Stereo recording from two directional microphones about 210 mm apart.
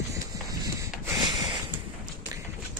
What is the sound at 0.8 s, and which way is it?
Rub, 20° right (ahead or behind).